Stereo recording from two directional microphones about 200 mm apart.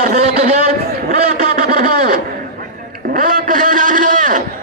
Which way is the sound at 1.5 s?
45° right (ahead or behind).